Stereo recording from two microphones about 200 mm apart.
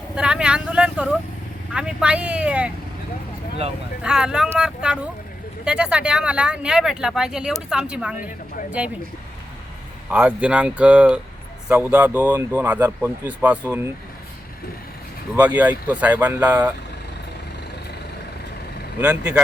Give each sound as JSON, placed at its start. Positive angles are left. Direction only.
{"t": 0.2, "sound": "speech", "side_deg": -5}
{"t": 4.0, "sound": "speech", "side_deg": -5}
{"t": 10.1, "sound": "speech", "side_deg": -10}
{"t": 15.4, "sound": "speech", "side_deg": -10}
{"t": 18.9, "sound": "speech", "side_deg": -5}